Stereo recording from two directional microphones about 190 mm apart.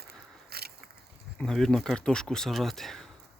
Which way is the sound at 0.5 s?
55° right (ahead or behind).